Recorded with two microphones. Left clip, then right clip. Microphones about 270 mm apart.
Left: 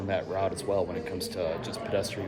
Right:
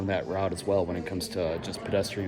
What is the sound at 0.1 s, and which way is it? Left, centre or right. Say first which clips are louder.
A man's voice: left 1 dB; right.